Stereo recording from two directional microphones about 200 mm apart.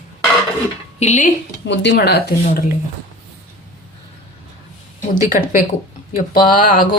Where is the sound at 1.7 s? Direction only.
60° left (ahead or behind).